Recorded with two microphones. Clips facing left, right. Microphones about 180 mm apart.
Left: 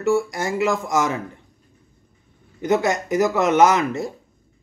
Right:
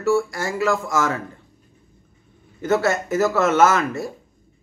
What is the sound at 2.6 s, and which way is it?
Speech, 15° left (ahead or behind).